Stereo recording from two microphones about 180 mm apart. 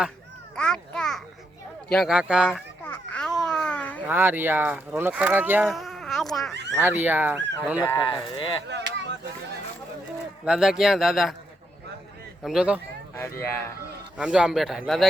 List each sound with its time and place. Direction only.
0.5 s a sound: 5° left (ahead or behind)
1.9 s speech: centre (ahead or behind)
2.8 s babbling: 10° left (ahead or behind)
4.0 s speech: 10° right (ahead or behind)
5.6 s baby cry: centre (ahead or behind)
6.5 s speech: 75° right (ahead or behind)
6.7 s speech: 10° right (ahead or behind)
7.8 s speech: 20° left (ahead or behind)
8.6 s a sound: 75° right (ahead or behind)
10.4 s speech: 5° right (ahead or behind)
12.4 s speech: 5° right (ahead or behind)
13.1 s speech: 15° left (ahead or behind)
14.2 s speech: 5° right (ahead or behind)